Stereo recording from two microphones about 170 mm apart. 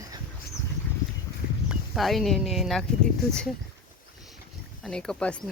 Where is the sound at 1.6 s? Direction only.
Centre (ahead or behind).